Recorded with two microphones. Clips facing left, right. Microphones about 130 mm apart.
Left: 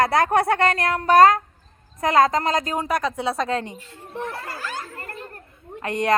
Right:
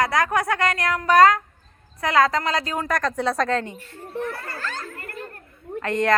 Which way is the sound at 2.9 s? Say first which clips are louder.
Even; 5° left (ahead or behind).